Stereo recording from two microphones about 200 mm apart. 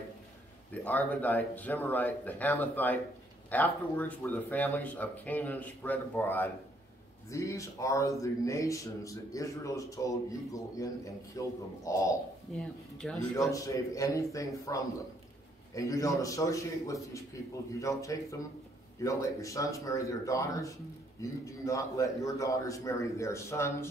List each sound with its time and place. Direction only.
0.8 s a man's voice: 10° left (ahead or behind)
12.5 s speech: centre (ahead or behind)
13.5 s a man's voice: 15° left (ahead or behind)